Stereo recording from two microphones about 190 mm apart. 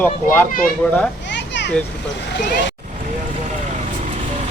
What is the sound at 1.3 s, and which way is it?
Vehicle, 65° left (ahead or behind).